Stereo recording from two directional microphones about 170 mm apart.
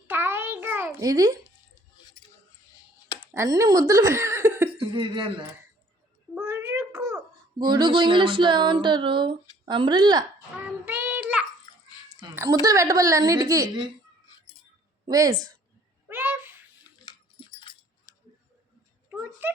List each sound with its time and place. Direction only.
0.1 s a sound: 10° right (ahead or behind)
3.3 s speech: 20° right (ahead or behind)
4.8 s a man's voice: 30° right (ahead or behind)
6.3 s a sound: 15° right (ahead or behind)
7.6 s speech: 25° right (ahead or behind)
10.8 s child singing: 10° right (ahead or behind)
12.2 s speech: 20° right (ahead or behind)
15.0 s speech: 20° right (ahead or behind)
16.0 s a sound: 10° right (ahead or behind)
17.6 s dog: 30° left (ahead or behind)